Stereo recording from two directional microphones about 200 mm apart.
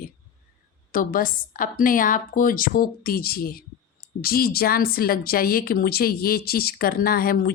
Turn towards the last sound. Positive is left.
turn(degrees=45)  # may be behind; listen again after turning